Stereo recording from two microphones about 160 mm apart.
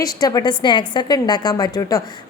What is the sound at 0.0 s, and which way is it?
A woman's voice, 25° left (ahead or behind).